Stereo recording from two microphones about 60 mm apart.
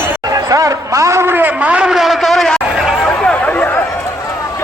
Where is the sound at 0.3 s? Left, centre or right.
Right.